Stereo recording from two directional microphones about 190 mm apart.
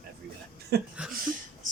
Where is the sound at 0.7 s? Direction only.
55° right (ahead or behind).